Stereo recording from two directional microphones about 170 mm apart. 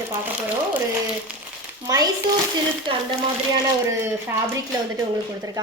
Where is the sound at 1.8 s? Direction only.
20° right (ahead or behind).